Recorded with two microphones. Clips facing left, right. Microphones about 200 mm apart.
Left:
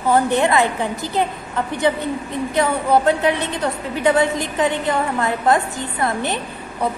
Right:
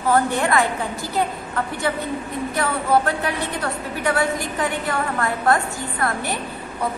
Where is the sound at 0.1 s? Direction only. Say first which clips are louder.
Left 3 dB; 20° left (ahead or behind).